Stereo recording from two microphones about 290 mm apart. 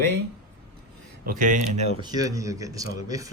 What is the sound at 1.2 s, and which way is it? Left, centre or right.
Speech, right.